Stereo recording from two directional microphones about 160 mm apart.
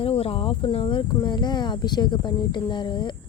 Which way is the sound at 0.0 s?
35° left (ahead or behind).